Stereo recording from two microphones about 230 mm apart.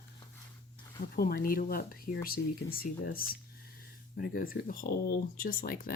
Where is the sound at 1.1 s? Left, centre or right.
Left.